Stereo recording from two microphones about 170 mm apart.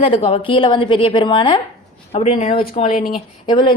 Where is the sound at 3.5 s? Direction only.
30° left (ahead or behind).